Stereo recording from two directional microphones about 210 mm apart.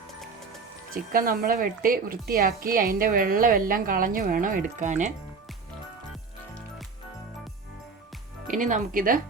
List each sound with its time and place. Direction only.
1.1 s a woman's voice: 45° right (ahead or behind)
8.4 s speech: 40° right (ahead or behind)